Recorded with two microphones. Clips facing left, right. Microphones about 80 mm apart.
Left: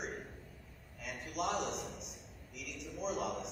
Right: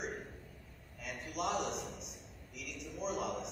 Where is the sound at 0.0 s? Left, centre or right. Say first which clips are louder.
Right 1 dB; centre.